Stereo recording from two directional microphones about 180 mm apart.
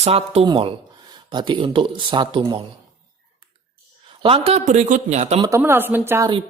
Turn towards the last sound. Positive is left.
turn(degrees=-15)  # may be behind; listen again after turning